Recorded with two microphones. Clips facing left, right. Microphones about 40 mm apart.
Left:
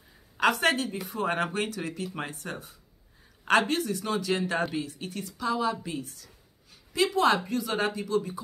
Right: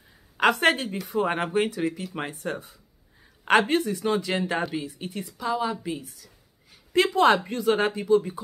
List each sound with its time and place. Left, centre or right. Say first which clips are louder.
0.4 s speech: right 3 dB; right
1.1 s speech: right 5 dB; centre
3.4 s a woman's voice: right 3 dB; right; by 6.3 s centre
6.9 s speech: right 4 dB; right